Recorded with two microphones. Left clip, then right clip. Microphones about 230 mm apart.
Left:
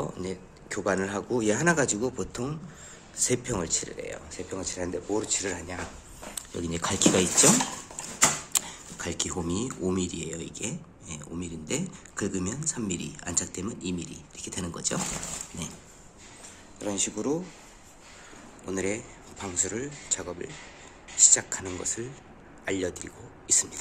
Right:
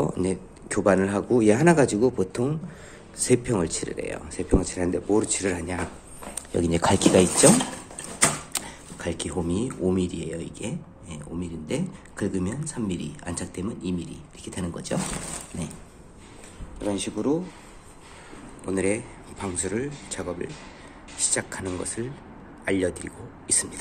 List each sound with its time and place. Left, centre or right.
0.0 s speech: centre
8.5 s speech: centre
16.8 s speech: centre
18.7 s speech: centre